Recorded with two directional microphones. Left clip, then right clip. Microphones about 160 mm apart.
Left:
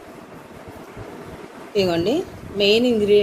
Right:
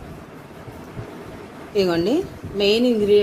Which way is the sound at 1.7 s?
40° right (ahead or behind).